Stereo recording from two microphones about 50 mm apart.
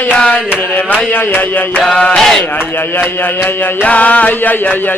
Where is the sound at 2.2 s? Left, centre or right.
Centre.